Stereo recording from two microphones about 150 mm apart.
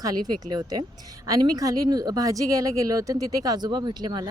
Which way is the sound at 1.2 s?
25° right (ahead or behind).